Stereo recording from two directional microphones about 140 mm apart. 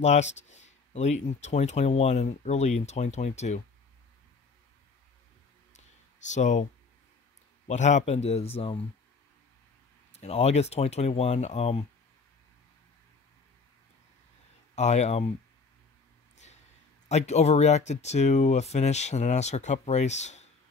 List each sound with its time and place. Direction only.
0.0 s speech: 55° left (ahead or behind)
5.7 s clicking: 60° left (ahead or behind)
7.6 s speech: 55° left (ahead or behind)
10.1 s speech: 50° left (ahead or behind)
14.8 s speech: 55° left (ahead or behind)
17.1 s speech: 50° left (ahead or behind)